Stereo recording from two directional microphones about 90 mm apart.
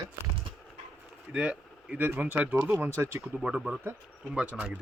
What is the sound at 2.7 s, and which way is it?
Speech, 30° right (ahead or behind).